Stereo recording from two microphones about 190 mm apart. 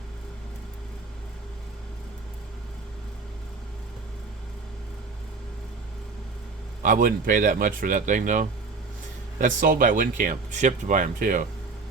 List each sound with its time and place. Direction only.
6.8 s speech: 45° right (ahead or behind)